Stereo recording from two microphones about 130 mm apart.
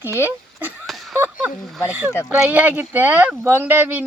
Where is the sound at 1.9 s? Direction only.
15° right (ahead or behind).